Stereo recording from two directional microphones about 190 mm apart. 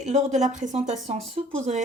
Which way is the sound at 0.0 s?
35° right (ahead or behind).